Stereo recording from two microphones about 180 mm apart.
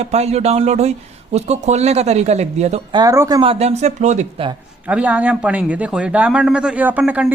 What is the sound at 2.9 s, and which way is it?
Speech, 20° right (ahead or behind).